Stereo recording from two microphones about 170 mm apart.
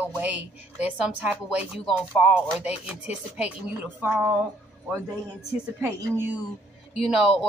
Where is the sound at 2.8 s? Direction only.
5° right (ahead or behind).